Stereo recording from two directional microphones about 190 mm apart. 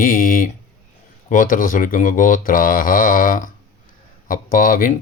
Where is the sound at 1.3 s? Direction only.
45° left (ahead or behind).